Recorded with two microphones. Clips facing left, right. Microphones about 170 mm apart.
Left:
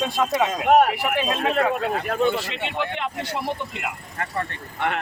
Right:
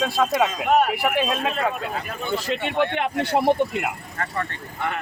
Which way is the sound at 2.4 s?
55° right (ahead or behind).